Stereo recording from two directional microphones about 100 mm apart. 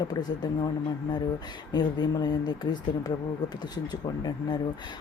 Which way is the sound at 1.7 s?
45° left (ahead or behind).